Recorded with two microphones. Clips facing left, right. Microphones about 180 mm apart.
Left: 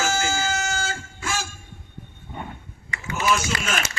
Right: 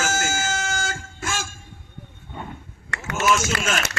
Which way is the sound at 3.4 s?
55° right (ahead or behind).